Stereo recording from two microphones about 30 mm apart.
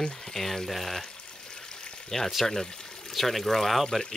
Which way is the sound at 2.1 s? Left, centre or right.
Centre.